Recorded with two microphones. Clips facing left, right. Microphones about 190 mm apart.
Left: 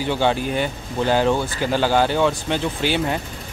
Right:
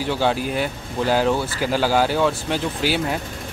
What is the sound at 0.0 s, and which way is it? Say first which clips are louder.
A man's voice: left 1 dB; centre (ahead or behind).